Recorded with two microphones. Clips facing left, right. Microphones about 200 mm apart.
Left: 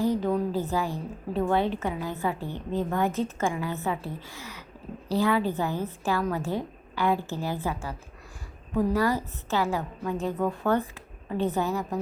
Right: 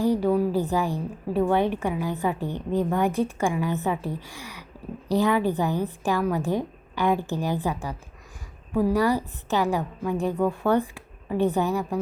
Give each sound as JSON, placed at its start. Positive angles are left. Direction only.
{"t": 0.0, "sound": "a woman's voice", "side_deg": -10}